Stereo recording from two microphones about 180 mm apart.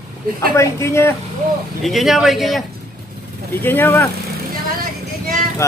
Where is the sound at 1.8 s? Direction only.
Centre (ahead or behind).